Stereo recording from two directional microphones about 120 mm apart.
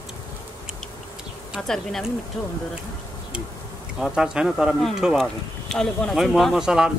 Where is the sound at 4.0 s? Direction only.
5° right (ahead or behind).